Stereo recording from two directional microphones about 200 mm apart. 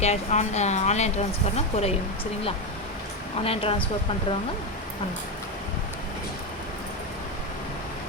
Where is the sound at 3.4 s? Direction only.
30° left (ahead or behind).